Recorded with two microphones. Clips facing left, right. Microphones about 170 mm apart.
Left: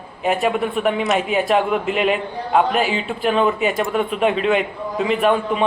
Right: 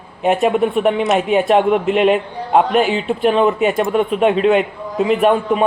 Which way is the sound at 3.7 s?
Centre (ahead or behind).